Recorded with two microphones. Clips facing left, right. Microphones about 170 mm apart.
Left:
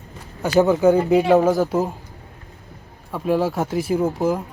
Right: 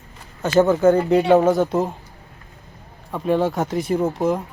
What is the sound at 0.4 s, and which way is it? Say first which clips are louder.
Speech: even; 10° left (ahead or behind).